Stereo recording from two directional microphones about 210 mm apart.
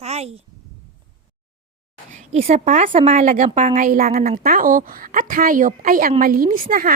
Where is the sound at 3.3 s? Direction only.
40° right (ahead or behind).